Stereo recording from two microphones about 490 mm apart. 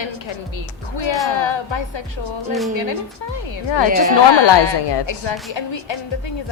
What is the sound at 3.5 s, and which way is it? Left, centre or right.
A woman's voice, left.